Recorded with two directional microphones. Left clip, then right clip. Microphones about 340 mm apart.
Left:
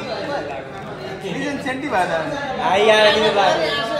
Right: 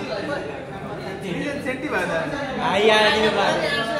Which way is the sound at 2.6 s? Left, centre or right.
Left.